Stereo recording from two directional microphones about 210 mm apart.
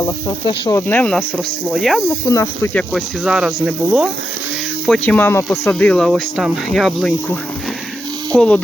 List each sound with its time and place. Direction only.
0.0 s speech: 20° left (ahead or behind); by 2.0 s centre (ahead or behind)
2.0 s speech: 15° left (ahead or behind)
2.9 s speech: 5° right (ahead or behind)
4.9 s speech: 5° left (ahead or behind)
8.4 s speech: 5° left (ahead or behind)